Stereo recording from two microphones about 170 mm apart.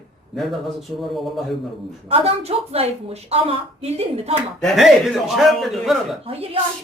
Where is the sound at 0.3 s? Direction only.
Centre (ahead or behind).